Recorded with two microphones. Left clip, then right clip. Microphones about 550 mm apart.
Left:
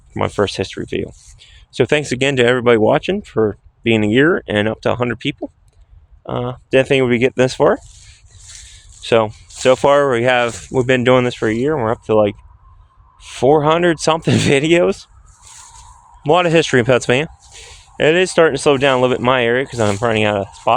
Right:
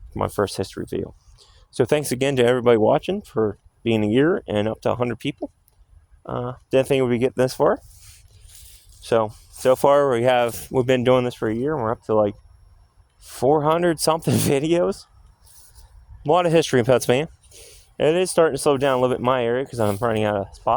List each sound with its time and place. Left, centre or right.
0.1 s speech: right
16.2 s speech: right